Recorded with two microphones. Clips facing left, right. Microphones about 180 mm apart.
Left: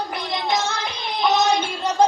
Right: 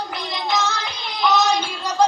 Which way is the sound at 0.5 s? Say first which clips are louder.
Right 2 dB; 25° left (ahead or behind).